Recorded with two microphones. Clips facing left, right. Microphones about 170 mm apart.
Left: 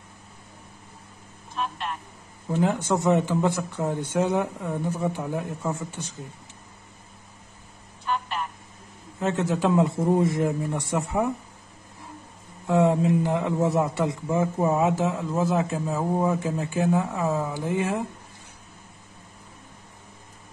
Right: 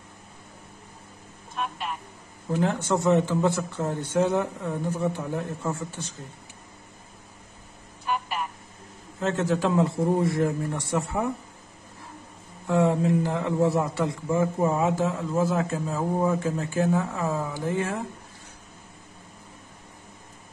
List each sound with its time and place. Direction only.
1.6 s speech: 5° right (ahead or behind)
2.6 s a man's voice: 15° left (ahead or behind)
8.1 s telephone: 5° right (ahead or behind)
9.2 s a man's voice: 20° left (ahead or behind)
12.6 s a man's voice: 15° left (ahead or behind)